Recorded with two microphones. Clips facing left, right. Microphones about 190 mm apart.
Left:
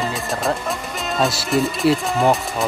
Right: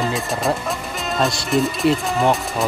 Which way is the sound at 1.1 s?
Centre (ahead or behind).